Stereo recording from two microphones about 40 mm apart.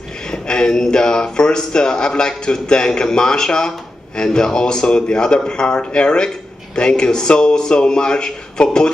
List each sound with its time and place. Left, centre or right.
0.3 s a man's voice: centre